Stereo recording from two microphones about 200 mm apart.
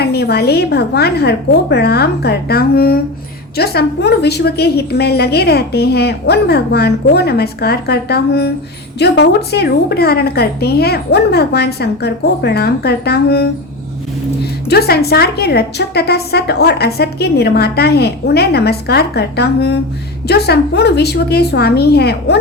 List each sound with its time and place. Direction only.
0.0 s a woman's voice: 55° left (ahead or behind)
14.7 s a woman's voice: 50° left (ahead or behind)